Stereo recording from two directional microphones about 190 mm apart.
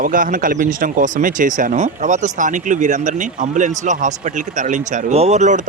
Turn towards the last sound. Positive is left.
turn(degrees=-40)  # may be behind; listen again after turning